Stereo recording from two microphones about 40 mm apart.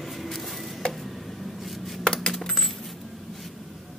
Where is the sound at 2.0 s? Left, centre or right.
Centre.